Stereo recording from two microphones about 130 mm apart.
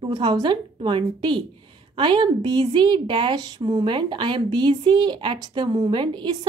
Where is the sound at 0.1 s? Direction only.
35° right (ahead or behind).